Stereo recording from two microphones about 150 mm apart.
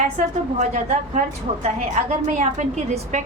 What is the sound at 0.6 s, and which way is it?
A woman's voice, 50° right (ahead or behind).